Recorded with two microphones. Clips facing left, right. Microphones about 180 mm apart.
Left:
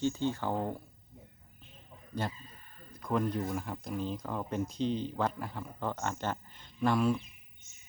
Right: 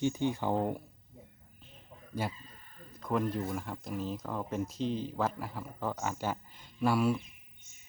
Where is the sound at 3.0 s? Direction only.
Centre (ahead or behind).